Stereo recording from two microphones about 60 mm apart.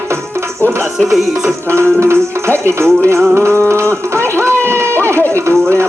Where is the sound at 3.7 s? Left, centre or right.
Right.